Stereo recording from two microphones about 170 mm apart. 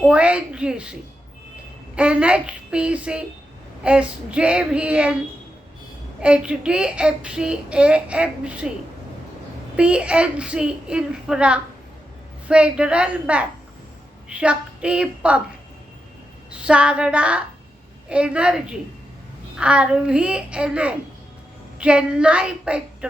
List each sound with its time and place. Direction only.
0.0 s a child's voice: 5° right (ahead or behind)
2.0 s a child's voice: 5° right (ahead or behind)
6.1 s a child's voice: 5° right (ahead or behind)
9.7 s a child's voice: 5° right (ahead or behind)
16.5 s a child's voice: 5° right (ahead or behind)